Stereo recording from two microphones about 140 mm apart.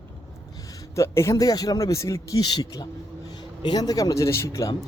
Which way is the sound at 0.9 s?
20° left (ahead or behind).